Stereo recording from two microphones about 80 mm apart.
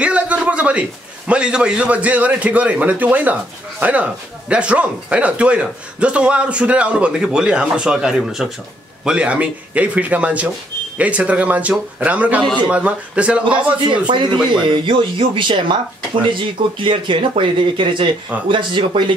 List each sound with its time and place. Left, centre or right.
0.0 s a man's voice: centre
13.8 s speech: right